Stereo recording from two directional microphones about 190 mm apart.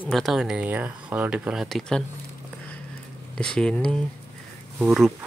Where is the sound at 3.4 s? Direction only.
5° left (ahead or behind).